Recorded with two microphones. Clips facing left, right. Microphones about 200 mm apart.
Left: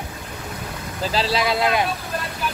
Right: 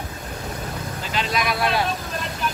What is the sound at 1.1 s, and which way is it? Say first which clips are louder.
Vehicle: left 3 dB; 30° left (ahead or behind).